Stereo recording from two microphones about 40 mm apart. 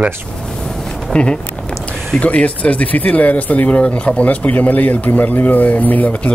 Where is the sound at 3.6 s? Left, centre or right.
Left.